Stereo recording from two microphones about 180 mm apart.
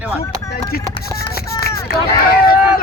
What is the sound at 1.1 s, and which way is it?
Speech, 60° left (ahead or behind).